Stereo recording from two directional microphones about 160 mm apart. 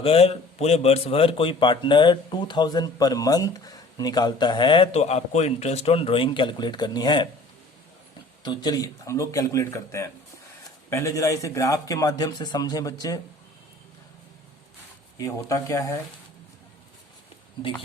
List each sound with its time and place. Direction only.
0.0 s a man's voice: 40° left (ahead or behind)
8.4 s a man's voice: 25° left (ahead or behind)
15.2 s a man's voice: 20° left (ahead or behind)